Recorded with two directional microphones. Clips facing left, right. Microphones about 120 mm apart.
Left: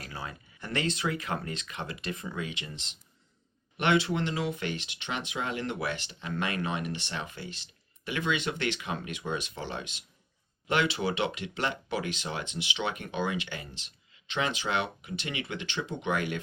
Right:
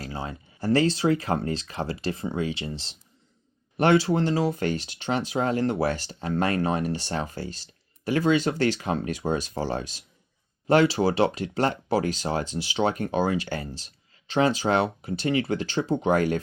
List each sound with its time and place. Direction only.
0.0 s speech: 30° right (ahead or behind)